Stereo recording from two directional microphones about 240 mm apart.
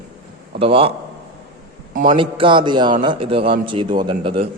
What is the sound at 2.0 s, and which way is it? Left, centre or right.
A man's voice, right.